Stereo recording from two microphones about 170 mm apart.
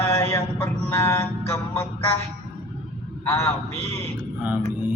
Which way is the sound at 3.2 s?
15° left (ahead or behind).